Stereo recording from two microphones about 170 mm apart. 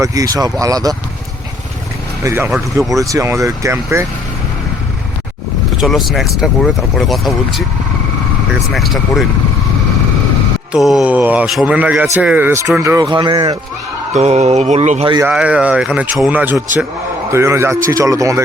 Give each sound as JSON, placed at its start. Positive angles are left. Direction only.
{"t": 0.0, "sound": "speech", "side_deg": -20}
{"t": 2.2, "sound": "speech", "side_deg": -15}
{"t": 5.8, "sound": "speech", "side_deg": 0}
{"t": 8.7, "sound": "speech", "side_deg": 0}
{"t": 10.7, "sound": "speech", "side_deg": 0}
{"t": 14.1, "sound": "a sound", "side_deg": -40}
{"t": 15.2, "sound": "speech", "side_deg": -5}